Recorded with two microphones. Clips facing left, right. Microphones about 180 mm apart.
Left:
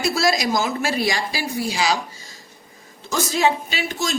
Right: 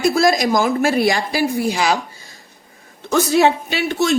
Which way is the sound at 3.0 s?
60° right (ahead or behind).